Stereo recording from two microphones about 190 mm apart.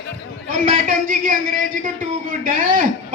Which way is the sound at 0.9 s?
45° right (ahead or behind).